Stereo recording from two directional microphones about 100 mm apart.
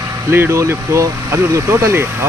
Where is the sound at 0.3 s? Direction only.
25° right (ahead or behind).